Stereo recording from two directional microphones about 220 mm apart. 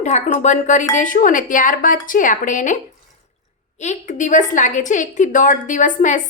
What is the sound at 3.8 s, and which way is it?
A woman's voice, 35° left (ahead or behind).